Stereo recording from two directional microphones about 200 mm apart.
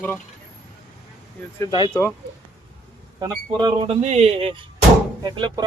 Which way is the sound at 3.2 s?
20° right (ahead or behind).